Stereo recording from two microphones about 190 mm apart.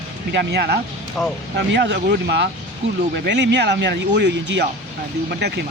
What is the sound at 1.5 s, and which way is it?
Speech, 65° right (ahead or behind).